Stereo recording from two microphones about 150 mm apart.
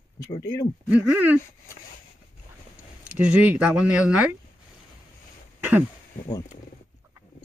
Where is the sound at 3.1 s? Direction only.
10° right (ahead or behind).